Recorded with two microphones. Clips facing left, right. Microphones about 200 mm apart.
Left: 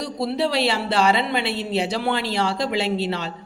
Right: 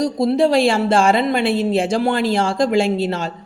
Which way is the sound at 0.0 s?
45° right (ahead or behind).